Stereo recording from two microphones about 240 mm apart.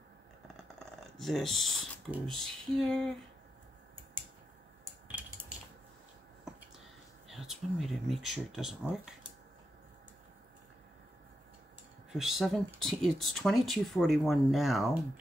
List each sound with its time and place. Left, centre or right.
1.1 s speech: centre
5.0 s a sound: centre
7.2 s speech: centre
12.1 s speech: centre